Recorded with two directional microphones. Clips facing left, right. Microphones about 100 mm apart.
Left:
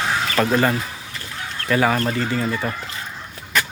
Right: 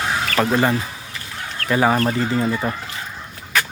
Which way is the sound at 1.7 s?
20° right (ahead or behind).